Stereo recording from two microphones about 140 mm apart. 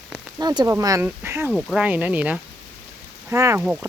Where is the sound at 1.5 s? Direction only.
5° left (ahead or behind).